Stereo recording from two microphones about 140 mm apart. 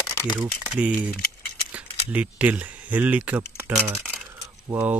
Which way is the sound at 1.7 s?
10° right (ahead or behind).